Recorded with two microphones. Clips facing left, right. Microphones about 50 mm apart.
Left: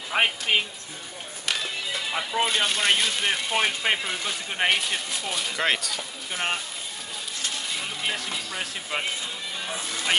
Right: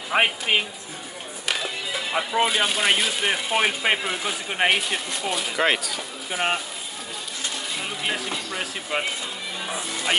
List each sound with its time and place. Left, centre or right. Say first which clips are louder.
0.1 s speech: right 2 dB; centre
7.4 s speech: right 1 dB; centre